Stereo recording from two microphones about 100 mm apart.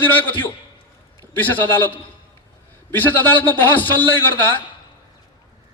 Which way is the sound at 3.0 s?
20° left (ahead or behind).